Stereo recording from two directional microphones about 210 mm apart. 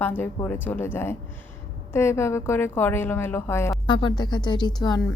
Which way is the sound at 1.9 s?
10° left (ahead or behind).